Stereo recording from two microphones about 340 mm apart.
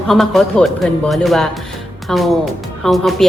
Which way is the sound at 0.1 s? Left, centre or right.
Centre.